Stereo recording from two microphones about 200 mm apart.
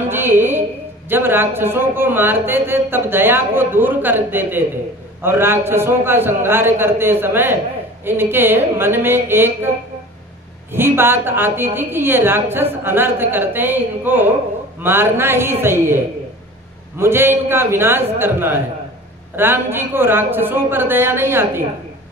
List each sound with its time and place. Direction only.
0.1 s a woman's voice: 10° right (ahead or behind)
10.7 s a woman's voice: 10° right (ahead or behind)
17.0 s a woman's voice: 10° right (ahead or behind)